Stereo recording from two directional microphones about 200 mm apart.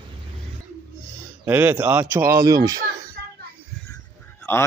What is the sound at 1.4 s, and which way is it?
Speech, 10° right (ahead or behind).